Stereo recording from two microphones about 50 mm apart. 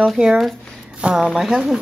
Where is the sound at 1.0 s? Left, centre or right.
Centre.